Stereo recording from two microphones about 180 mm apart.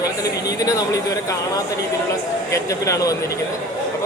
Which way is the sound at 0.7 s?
20° left (ahead or behind).